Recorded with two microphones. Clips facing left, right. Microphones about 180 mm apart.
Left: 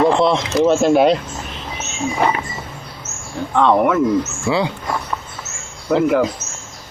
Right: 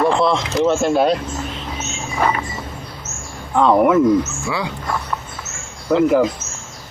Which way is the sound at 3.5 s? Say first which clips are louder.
Right 1 dB; 5° right (ahead or behind).